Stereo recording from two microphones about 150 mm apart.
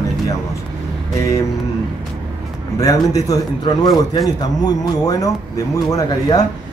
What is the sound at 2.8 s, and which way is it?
Speech, 25° left (ahead or behind).